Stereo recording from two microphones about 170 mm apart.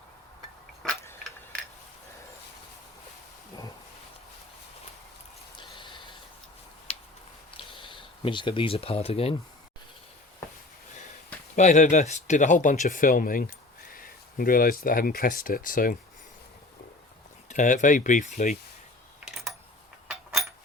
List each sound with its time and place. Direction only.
0.8 s tick-tock: centre (ahead or behind)
5.5 s a sound: 30° left (ahead or behind)
7.7 s speech: 30° left (ahead or behind)
11.5 s speech: 45° left (ahead or behind)
17.5 s speech: 45° left (ahead or behind)
19.2 s a sound: centre (ahead or behind)